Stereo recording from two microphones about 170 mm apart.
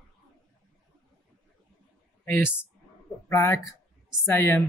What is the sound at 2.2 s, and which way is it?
Speech, 10° left (ahead or behind).